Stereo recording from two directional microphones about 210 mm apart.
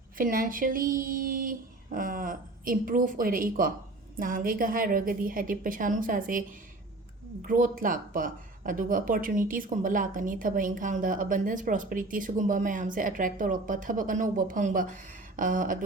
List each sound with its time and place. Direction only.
0.2 s speech: 40° right (ahead or behind)
7.4 s speech: 40° right (ahead or behind)